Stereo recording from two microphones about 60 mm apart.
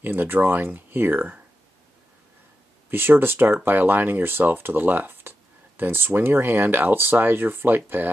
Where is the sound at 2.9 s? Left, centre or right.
Right.